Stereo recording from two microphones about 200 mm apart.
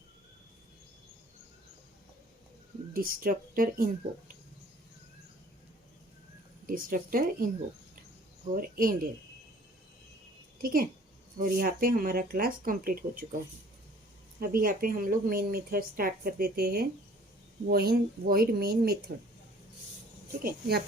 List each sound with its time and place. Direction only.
2.9 s speech: 45° right (ahead or behind)
6.7 s speech: 45° right (ahead or behind)
8.5 s speech: 45° right (ahead or behind)
10.6 s speech: 45° right (ahead or behind)
14.3 s speech: 45° right (ahead or behind)
20.4 s speech: 50° right (ahead or behind)